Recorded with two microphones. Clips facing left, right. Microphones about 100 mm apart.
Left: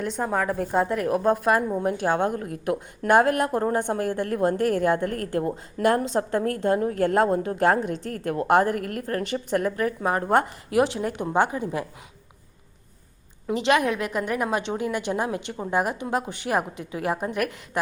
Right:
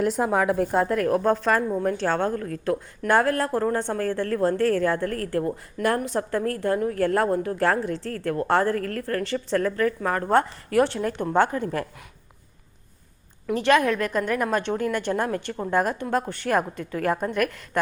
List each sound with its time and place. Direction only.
0.0 s a woman's voice: 5° right (ahead or behind); by 11.9 s 10° left (ahead or behind)
13.5 s a woman's voice: 20° left (ahead or behind)